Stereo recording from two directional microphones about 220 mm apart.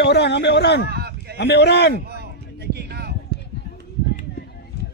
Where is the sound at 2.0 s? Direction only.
45° right (ahead or behind).